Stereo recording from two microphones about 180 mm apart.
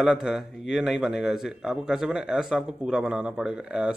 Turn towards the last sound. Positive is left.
turn(degrees=-5)  # may be behind; listen again after turning